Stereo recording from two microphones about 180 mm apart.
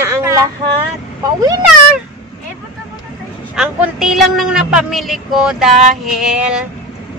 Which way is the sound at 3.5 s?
5° right (ahead or behind).